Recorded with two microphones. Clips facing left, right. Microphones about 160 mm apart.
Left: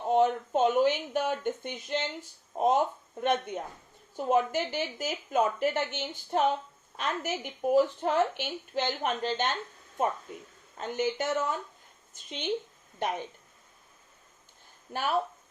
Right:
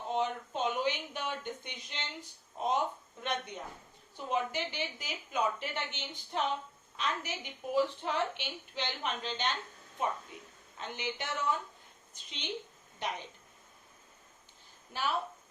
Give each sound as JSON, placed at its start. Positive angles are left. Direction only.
{"t": 0.1, "sound": "a woman's voice", "side_deg": 50}
{"t": 14.9, "sound": "a woman's voice", "side_deg": 45}